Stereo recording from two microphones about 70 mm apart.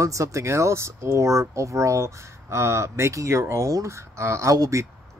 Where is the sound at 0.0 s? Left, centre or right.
Right.